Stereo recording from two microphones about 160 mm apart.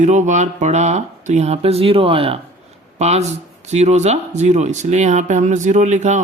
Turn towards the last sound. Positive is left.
turn(degrees=-50)  # may be behind; listen again after turning